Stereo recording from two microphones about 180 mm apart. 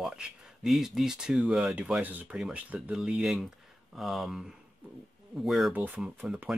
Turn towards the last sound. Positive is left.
turn(degrees=-5)  # may be behind; listen again after turning